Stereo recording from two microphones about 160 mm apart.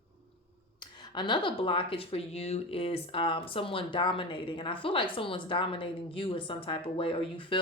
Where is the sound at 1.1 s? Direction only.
30° left (ahead or behind).